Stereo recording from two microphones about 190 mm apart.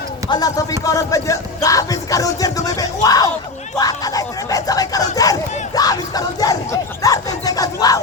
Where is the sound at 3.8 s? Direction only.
20° left (ahead or behind).